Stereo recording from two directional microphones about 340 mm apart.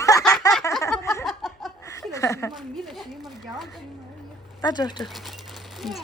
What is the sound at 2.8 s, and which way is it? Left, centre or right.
Speech, centre.